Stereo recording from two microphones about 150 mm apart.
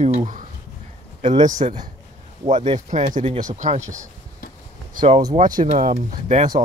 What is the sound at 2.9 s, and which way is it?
Speech, 55° right (ahead or behind).